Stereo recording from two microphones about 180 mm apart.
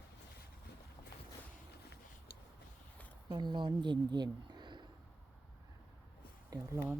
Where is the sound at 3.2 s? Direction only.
25° right (ahead or behind).